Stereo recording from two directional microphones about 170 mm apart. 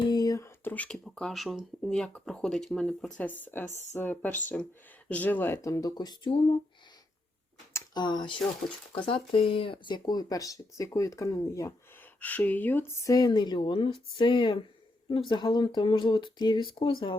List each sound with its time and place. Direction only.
0.0 s speech: 25° left (ahead or behind)
7.7 s a sound: 15° left (ahead or behind)
8.0 s speech: 25° left (ahead or behind)